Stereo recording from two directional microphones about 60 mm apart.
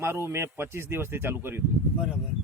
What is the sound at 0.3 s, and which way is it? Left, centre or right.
Speech, right.